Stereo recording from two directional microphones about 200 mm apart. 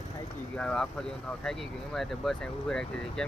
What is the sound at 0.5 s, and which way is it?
Speech, 5° left (ahead or behind).